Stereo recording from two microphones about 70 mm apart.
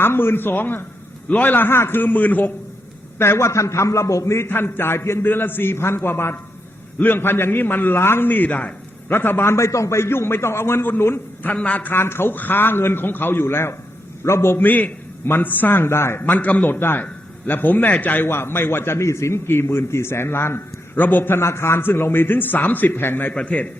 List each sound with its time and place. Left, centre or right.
0.0 s a man's voice: left
3.2 s a man's voice: left
4.4 s a man's voice: left
11.5 s a man's voice: centre
11.9 s a man's voice: left
16.2 s a man's voice: left
23.3 s a man's voice: centre